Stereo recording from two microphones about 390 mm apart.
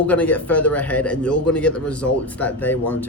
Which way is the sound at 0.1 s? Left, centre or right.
Centre.